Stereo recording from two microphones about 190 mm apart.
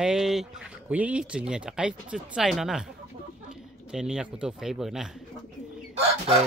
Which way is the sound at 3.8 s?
5° right (ahead or behind).